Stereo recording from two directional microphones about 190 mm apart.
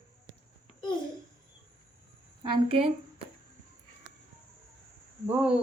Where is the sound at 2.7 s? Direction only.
30° right (ahead or behind).